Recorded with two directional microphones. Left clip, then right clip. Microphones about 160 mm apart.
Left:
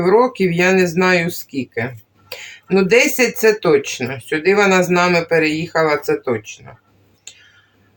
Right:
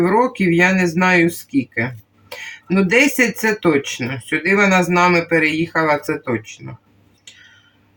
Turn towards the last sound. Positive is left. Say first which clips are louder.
# left 3 dB
turn(degrees=30)  # may be behind; listen again after turning